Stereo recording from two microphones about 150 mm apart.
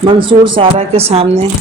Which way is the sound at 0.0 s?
35° right (ahead or behind).